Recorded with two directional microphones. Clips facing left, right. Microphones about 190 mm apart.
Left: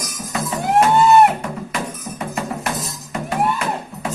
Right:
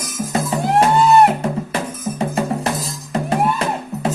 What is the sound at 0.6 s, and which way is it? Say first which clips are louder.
Music: left 1 dB; centre (ahead or behind).